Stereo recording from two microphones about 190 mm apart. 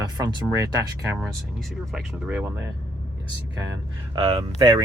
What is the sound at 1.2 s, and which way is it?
Speech, centre (ahead or behind).